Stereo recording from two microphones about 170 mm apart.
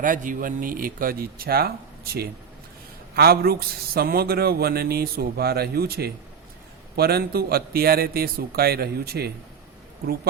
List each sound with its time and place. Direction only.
0.0 s speech: 50° right (ahead or behind)